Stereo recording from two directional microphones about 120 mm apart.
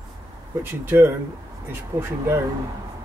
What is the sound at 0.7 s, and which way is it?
Speech, 20° right (ahead or behind).